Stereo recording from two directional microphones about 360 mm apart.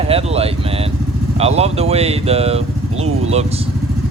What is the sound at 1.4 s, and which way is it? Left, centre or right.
Speech, centre.